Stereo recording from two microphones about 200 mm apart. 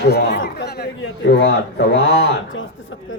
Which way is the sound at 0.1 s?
55° left (ahead or behind).